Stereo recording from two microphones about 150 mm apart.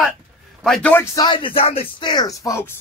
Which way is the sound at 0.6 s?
5° left (ahead or behind).